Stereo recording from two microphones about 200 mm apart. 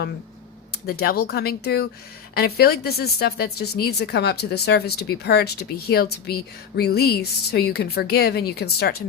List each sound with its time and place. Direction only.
0.9 s speech: 50° left (ahead or behind)